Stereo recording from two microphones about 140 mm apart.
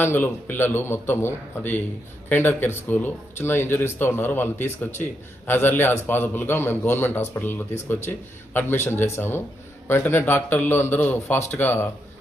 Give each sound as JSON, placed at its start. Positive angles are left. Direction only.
{"t": 0.0, "sound": "speech", "side_deg": 15}